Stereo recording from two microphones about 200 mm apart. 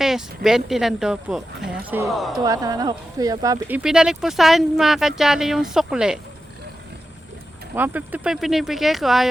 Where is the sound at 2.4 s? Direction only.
15° right (ahead or behind).